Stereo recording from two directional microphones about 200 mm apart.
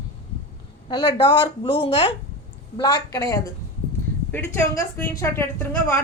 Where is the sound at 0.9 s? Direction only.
20° left (ahead or behind).